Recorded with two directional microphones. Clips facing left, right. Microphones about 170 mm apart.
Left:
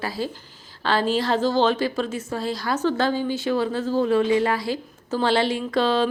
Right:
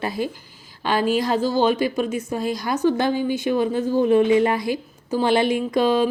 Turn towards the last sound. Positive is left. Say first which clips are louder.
# right 2 dB
turn(degrees=-15)  # may be behind; listen again after turning